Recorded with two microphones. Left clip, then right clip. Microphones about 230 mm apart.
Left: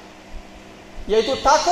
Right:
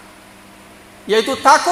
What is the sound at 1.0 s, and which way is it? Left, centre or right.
Speech, right.